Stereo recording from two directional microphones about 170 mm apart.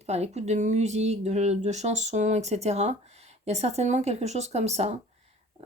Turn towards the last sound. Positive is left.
turn(degrees=-40)  # may be behind; listen again after turning